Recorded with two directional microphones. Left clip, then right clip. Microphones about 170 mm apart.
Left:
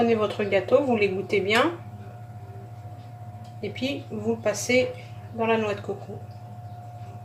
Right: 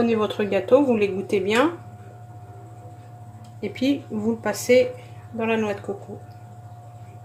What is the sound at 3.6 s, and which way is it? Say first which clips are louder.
Speech: right 5 dB; 50° right (ahead or behind).